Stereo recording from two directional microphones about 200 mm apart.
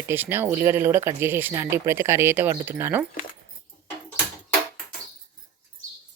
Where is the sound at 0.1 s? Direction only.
10° right (ahead or behind).